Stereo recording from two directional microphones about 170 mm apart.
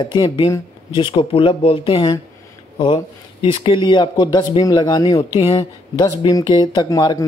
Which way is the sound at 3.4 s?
30° left (ahead or behind).